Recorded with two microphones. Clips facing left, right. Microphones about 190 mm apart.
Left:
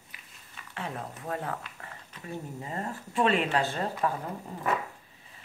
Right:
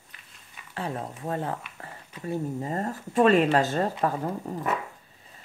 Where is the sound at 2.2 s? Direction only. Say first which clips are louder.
Right 9 dB; 40° right (ahead or behind).